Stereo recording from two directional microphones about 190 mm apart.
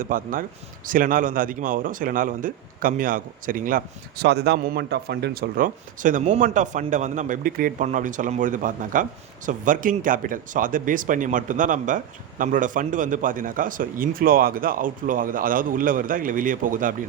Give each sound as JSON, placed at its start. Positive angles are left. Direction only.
{"t": 0.0, "sound": "a man's voice", "side_deg": -45}